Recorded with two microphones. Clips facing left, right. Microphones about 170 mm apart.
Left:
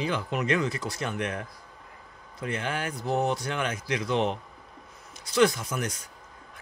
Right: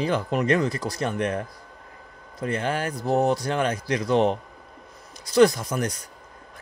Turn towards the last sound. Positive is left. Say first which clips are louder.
# right 5 dB
turn(degrees=-35)  # may be behind; listen again after turning